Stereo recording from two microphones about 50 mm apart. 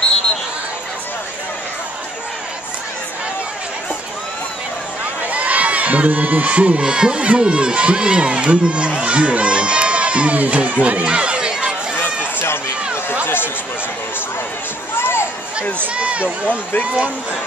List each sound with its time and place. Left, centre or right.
5.3 s speech: right
12.0 s chatter: left
15.0 s a sound: left
15.9 s speech: right